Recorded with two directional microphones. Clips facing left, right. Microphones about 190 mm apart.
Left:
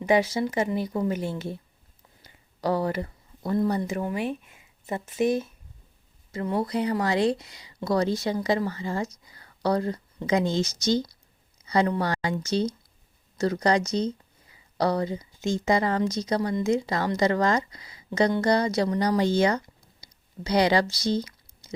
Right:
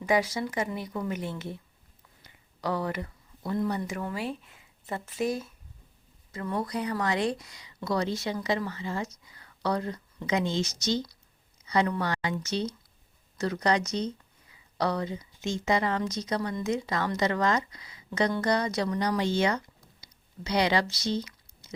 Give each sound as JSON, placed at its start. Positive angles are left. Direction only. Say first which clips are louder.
{"t": 0.0, "sound": "a woman's voice", "louder": "left 4 dB", "side_deg": 25}